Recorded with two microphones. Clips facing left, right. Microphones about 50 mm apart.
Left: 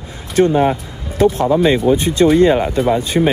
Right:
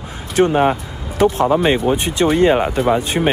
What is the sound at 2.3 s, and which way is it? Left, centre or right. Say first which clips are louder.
Speech: left 2 dB; right.